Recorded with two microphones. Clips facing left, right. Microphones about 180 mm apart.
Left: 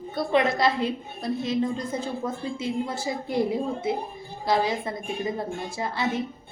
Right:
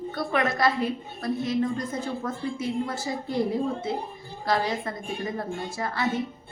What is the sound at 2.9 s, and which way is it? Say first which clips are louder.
Speech: left 1 dB; 20° left (ahead or behind).